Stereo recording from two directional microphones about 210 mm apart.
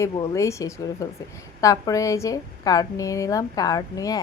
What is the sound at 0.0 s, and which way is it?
A woman's voice, 15° left (ahead or behind).